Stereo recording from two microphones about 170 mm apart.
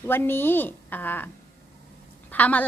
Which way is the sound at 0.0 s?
15° left (ahead or behind).